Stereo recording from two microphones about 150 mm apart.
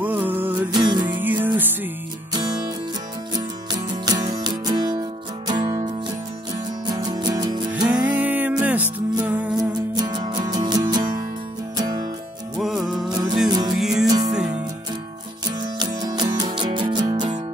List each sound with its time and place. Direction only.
0.0 s music: 10° right (ahead or behind)
0.7 s music: 30° right (ahead or behind)
1.2 s music: 10° right (ahead or behind)
4.0 s music: 25° right (ahead or behind)
7.9 s music: 10° right (ahead or behind)
9.9 s music: 30° right (ahead or behind)
12.5 s music: centre (ahead or behind)
13.1 s music: 25° right (ahead or behind)
13.7 s music: 5° right (ahead or behind)
15.6 s music: 30° right (ahead or behind)